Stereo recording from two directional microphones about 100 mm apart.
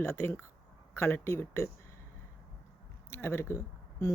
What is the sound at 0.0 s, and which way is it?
Speech, 25° left (ahead or behind).